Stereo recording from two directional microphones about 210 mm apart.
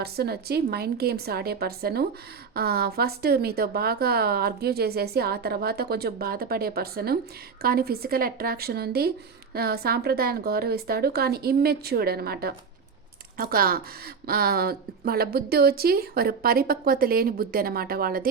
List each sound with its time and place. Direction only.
0.0 s a woman's voice: 50° right (ahead or behind)